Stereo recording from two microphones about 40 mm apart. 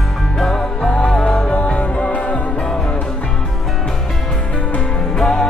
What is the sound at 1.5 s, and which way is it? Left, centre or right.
Music, left.